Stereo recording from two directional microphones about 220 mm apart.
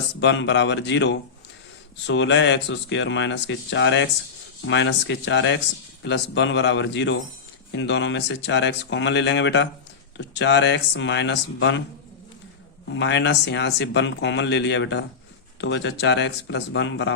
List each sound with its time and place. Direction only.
0.2 s speech: 55° left (ahead or behind)
12.9 s speech: 55° left (ahead or behind)